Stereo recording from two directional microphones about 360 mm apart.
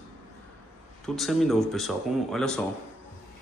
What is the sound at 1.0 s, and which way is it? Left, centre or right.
A man's voice, centre.